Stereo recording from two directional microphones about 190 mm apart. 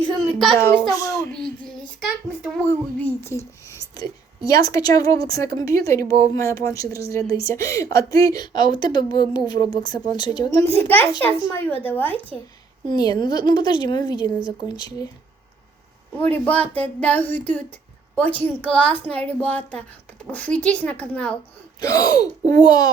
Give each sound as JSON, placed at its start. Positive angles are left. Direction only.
{"t": 0.0, "sound": "a sound", "side_deg": 0}
{"t": 0.9, "sound": "speech", "side_deg": 15}
{"t": 1.3, "sound": "a child's voice", "side_deg": 5}
{"t": 10.8, "sound": "speech", "side_deg": 10}
{"t": 12.9, "sound": "speech", "side_deg": 20}
{"t": 16.1, "sound": "speech", "side_deg": 10}
{"t": 21.8, "sound": "speech", "side_deg": 20}